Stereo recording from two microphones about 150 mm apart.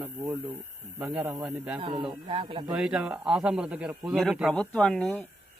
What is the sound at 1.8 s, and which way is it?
Speech, 35° right (ahead or behind).